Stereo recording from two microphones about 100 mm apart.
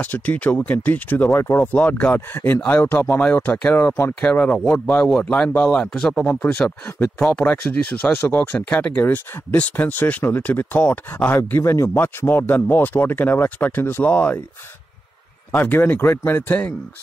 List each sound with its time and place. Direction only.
0.0 s speech: 15° left (ahead or behind)
1.6 s speech: 15° left (ahead or behind)
15.5 s speech: 20° left (ahead or behind)